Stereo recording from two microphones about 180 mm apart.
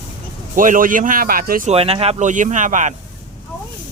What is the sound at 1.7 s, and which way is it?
Speech, 30° right (ahead or behind).